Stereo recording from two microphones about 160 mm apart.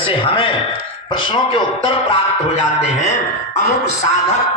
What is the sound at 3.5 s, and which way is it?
Speech, 45° left (ahead or behind).